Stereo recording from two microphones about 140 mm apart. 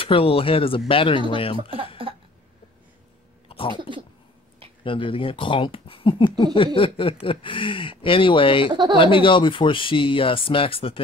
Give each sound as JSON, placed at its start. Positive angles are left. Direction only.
{"t": 0.0, "sound": "speech", "side_deg": 40}
{"t": 3.4, "sound": "a sound", "side_deg": 40}
{"t": 4.8, "sound": "speech", "side_deg": 40}